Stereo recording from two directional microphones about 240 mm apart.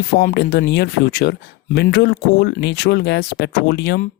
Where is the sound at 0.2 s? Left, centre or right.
Left.